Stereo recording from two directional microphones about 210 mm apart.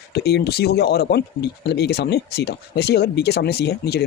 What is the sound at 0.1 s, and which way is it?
Speech, 50° left (ahead or behind).